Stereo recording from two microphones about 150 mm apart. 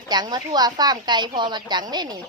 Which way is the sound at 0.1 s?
30° right (ahead or behind).